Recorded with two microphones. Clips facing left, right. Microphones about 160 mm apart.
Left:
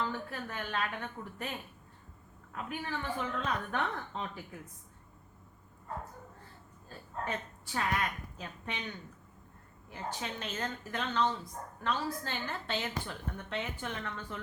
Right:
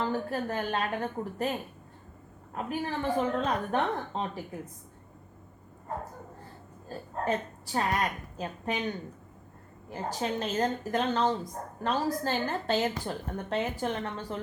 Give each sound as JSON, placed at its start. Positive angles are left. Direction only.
{"t": 0.0, "sound": "a woman's voice", "side_deg": -40}
{"t": 6.8, "sound": "a woman's voice", "side_deg": -40}